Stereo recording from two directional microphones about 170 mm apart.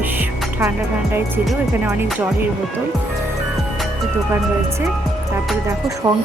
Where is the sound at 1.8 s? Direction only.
10° right (ahead or behind).